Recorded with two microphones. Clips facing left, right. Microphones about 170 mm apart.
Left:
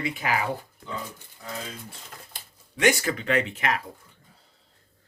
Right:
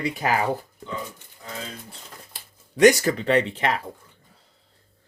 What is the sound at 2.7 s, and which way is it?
Speech, 40° right (ahead or behind).